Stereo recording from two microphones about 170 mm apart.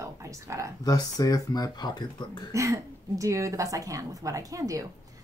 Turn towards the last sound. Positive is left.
turn(degrees=-20)  # may be behind; listen again after turning